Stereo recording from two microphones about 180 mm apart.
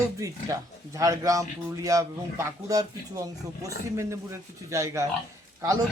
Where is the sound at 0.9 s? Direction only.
20° right (ahead or behind).